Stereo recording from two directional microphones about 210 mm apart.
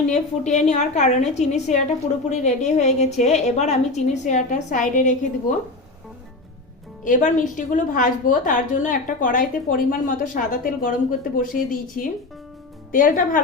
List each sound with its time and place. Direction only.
0.1 s a woman's voice: 35° left (ahead or behind)
7.0 s a woman's voice: 40° left (ahead or behind)